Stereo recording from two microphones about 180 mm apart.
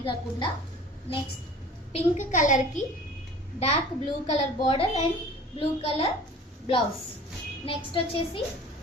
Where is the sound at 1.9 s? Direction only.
40° left (ahead or behind).